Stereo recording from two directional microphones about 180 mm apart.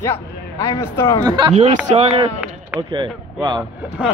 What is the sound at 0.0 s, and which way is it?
A man's voice, 15° left (ahead or behind).